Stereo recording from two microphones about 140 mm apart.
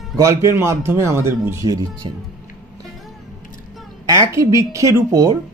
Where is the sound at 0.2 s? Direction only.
20° right (ahead or behind).